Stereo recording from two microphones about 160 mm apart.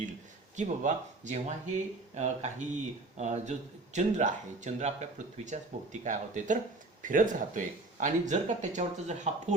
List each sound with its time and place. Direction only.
0.5 s speech: 50° right (ahead or behind)